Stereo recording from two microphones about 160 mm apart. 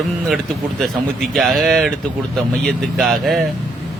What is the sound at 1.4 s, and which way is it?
Speech, centre (ahead or behind).